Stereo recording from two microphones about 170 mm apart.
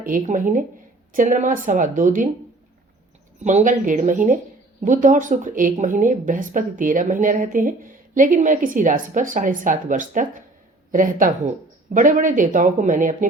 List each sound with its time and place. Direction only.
0.3 s a woman's voice: 50° right (ahead or behind)
3.4 s a woman's voice: 45° right (ahead or behind)